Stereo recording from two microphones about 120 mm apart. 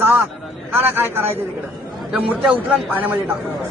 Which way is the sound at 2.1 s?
10° right (ahead or behind).